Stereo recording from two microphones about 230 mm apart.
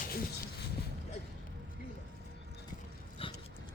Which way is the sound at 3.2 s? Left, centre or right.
Left.